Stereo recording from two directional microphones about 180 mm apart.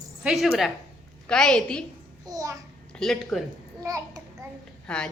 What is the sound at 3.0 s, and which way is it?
Speech, centre (ahead or behind).